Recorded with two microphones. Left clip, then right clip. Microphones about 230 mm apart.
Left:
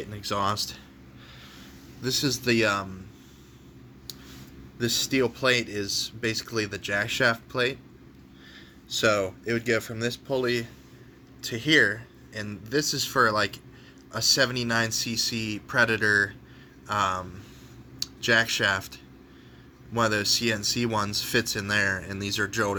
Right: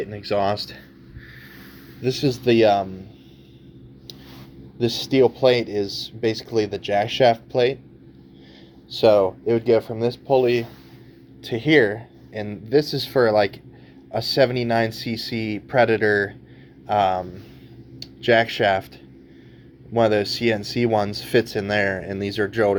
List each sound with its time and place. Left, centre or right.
0.0 s speech: centre
2.2 s speech: centre
4.9 s speech: left
5.4 s speech: centre
5.9 s speech: left
6.1 s speech: centre
7.1 s speech: left
9.0 s speech: centre
20.0 s speech: centre